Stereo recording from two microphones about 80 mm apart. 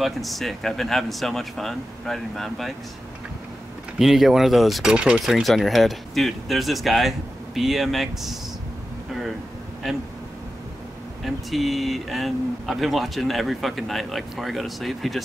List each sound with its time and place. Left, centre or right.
0.0 s speech: centre
4.0 s speech: centre
4.9 s speech: centre
5.2 s speech: centre
9.8 s speech: centre
11.2 s speech: centre